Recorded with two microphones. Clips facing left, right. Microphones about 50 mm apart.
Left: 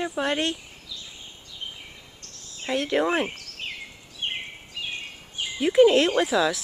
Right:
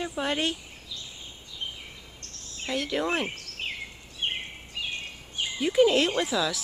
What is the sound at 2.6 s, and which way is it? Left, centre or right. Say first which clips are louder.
Speech: left 5 dB; left.